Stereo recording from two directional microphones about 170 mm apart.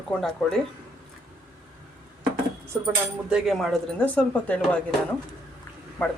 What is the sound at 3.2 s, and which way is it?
Speech, 5° right (ahead or behind).